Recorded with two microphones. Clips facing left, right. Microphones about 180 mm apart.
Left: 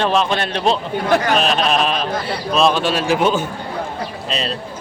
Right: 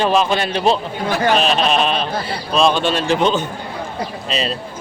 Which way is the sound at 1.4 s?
Centre (ahead or behind).